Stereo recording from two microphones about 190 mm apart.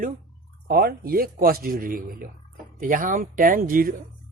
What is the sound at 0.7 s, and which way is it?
Speech, 50° right (ahead or behind).